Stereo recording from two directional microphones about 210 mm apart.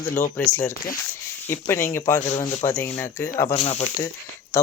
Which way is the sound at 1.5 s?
10° left (ahead or behind).